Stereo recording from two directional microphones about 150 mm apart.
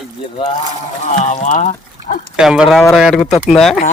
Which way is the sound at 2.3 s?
5° right (ahead or behind).